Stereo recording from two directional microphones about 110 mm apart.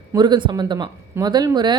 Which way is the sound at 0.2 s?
45° right (ahead or behind).